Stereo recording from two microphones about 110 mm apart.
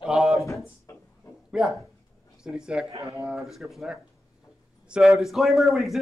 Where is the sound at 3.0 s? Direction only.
30° left (ahead or behind).